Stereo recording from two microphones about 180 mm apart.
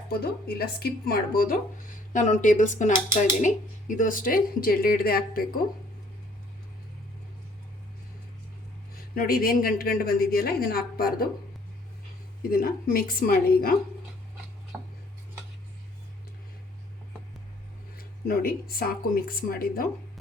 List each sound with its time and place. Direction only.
0.1 s a woman's voice: 60° left (ahead or behind)
9.1 s a woman's voice: 55° left (ahead or behind)
12.4 s a woman's voice: 55° left (ahead or behind)
17.9 s a woman's voice: 55° left (ahead or behind)